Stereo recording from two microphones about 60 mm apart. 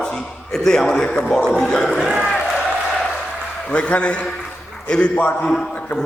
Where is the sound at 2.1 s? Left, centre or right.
Centre.